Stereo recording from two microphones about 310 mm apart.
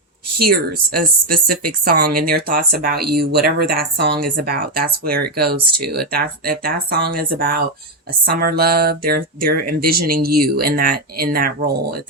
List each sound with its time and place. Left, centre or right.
0.3 s speech: right